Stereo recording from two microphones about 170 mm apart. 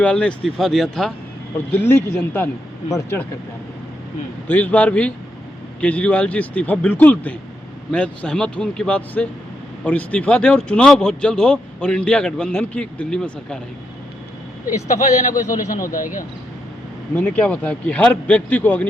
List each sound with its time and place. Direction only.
0.0 s speech: 5° left (ahead or behind)
4.4 s speech: 10° left (ahead or behind)
14.8 s speech: 45° left (ahead or behind)
17.2 s speech: 10° left (ahead or behind)